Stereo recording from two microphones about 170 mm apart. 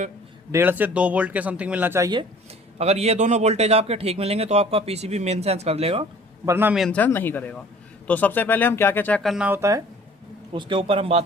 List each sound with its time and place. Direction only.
0.5 s speech: 10° right (ahead or behind)
2.7 s a man's voice: 40° right (ahead or behind)
6.4 s speech: 15° right (ahead or behind)
6.7 s speech: 5° left (ahead or behind)
9.5 s speech: 15° right (ahead or behind)
10.5 s a man's voice: 30° right (ahead or behind)